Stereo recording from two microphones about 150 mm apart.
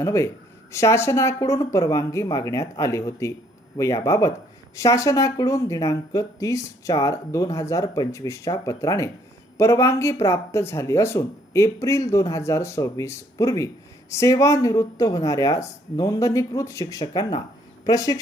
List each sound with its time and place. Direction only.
0.0 s speech: 20° left (ahead or behind)